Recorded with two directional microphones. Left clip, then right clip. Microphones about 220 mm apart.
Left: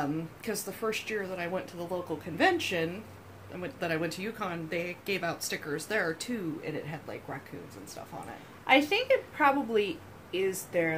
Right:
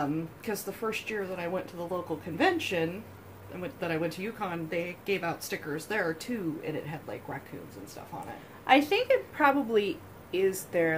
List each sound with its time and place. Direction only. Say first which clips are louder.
0.0 s speech: right 1 dB; 15° left (ahead or behind)
8.6 s a woman's voice: right 1 dB; 15° right (ahead or behind)